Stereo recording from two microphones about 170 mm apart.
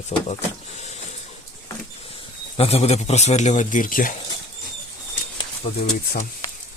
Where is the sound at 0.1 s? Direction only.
35° left (ahead or behind).